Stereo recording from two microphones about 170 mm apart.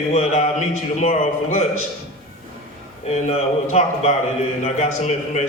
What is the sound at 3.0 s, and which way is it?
A man's voice, 40° left (ahead or behind).